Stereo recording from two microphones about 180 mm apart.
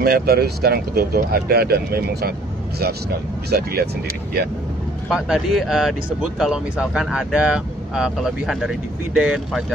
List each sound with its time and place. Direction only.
0.0 s speech: 60° right (ahead or behind)
5.1 s speech: 5° right (ahead or behind)